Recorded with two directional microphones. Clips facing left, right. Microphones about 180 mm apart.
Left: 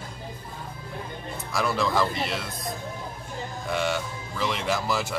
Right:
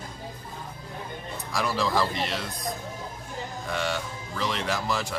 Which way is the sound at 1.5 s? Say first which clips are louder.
Left 1 dB; centre (ahead or behind).